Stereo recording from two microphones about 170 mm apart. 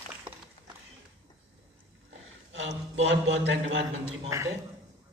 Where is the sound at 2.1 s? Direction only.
90° right.